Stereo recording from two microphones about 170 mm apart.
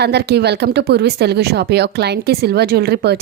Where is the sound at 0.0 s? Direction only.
75° right (ahead or behind).